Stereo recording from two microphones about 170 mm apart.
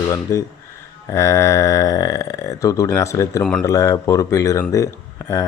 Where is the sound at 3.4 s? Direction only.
5° left (ahead or behind).